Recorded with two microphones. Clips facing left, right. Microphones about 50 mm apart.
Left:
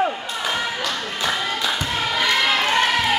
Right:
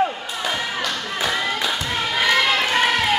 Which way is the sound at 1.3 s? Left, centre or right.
Centre.